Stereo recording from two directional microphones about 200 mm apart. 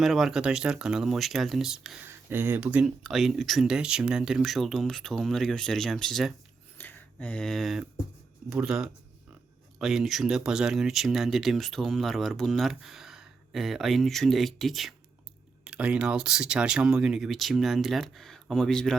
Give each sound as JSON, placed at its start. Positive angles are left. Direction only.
{"t": 0.0, "sound": "speech", "side_deg": 0}